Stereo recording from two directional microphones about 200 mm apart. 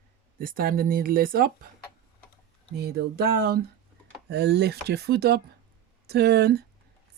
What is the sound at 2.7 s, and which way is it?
Speech, 50° right (ahead or behind).